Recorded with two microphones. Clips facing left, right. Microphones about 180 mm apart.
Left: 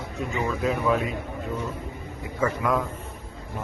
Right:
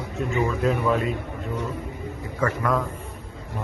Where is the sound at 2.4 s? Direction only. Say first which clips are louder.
Even; 5° left (ahead or behind).